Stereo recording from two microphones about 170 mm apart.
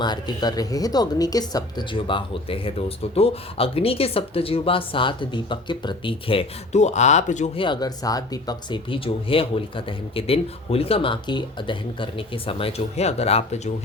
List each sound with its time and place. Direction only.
0.0 s speech: 25° left (ahead or behind)